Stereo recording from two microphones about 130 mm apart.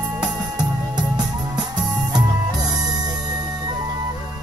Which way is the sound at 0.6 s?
30° right (ahead or behind).